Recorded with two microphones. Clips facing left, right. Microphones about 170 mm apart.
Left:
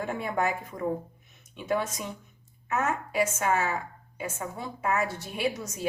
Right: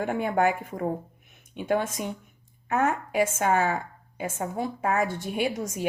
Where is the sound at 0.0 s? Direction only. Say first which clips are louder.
Right 5 dB; 55° right (ahead or behind).